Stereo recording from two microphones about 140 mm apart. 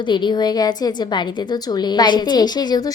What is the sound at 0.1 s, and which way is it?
A woman's voice, 35° left (ahead or behind).